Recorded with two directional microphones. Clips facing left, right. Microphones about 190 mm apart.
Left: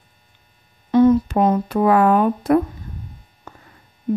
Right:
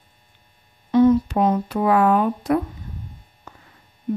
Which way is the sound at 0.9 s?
50° left (ahead or behind).